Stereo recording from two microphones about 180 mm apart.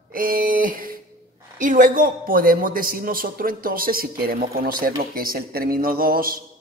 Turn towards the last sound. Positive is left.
turn(degrees=-55)  # may be behind; listen again after turning